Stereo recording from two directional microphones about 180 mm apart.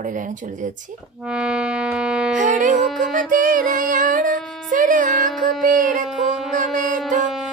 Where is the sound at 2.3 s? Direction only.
45° right (ahead or behind).